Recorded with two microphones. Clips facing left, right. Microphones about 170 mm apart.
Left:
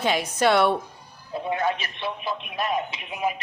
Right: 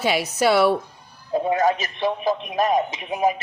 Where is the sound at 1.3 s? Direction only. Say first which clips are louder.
Right 6 dB; 40° right (ahead or behind).